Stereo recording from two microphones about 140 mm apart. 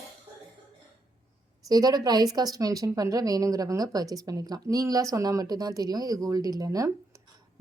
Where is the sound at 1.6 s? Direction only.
25° right (ahead or behind).